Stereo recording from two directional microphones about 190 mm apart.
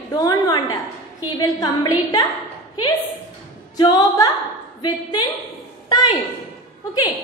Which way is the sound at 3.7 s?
20° left (ahead or behind).